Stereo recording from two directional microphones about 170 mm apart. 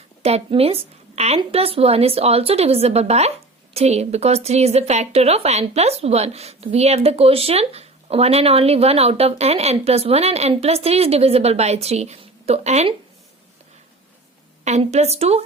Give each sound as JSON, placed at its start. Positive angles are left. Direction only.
{"t": 0.2, "sound": "speech", "side_deg": -35}
{"t": 14.6, "sound": "speech", "side_deg": -40}